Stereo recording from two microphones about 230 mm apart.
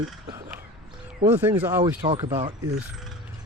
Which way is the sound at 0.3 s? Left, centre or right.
Centre.